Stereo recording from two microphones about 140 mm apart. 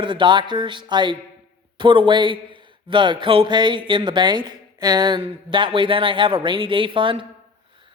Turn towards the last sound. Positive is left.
turn(degrees=-35)  # may be behind; listen again after turning